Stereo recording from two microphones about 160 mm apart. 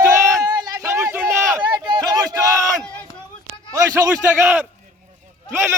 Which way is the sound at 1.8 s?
25° right (ahead or behind).